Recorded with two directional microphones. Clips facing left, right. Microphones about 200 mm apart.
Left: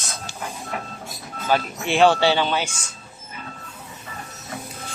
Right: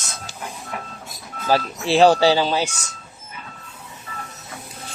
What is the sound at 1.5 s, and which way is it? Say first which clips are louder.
Speech: right 3 dB; 35° right (ahead or behind).